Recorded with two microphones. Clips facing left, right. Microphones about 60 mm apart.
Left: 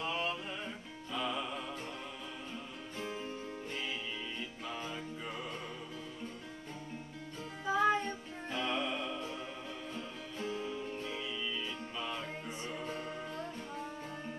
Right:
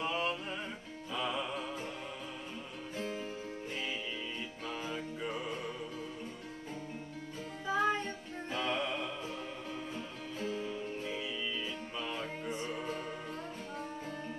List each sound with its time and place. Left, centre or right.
0.0 s music: centre
3.0 s music: left
4.7 s music: centre
7.6 s music: centre
10.4 s music: centre